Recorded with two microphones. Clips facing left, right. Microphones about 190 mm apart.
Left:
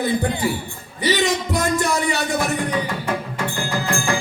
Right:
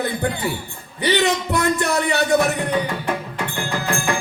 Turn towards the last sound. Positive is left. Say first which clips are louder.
# even
turn(degrees=-60)  # may be behind; listen again after turning